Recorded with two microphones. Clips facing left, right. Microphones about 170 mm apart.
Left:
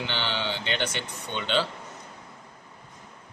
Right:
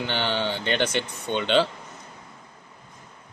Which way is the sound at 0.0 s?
45° right (ahead or behind).